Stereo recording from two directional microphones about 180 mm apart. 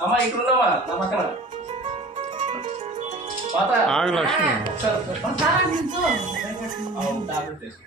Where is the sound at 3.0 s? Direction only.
40° right (ahead or behind).